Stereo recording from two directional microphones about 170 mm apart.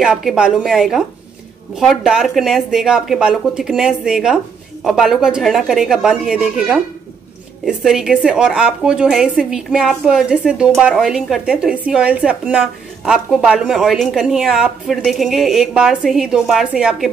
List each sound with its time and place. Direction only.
0.0 s a woman's voice: centre (ahead or behind)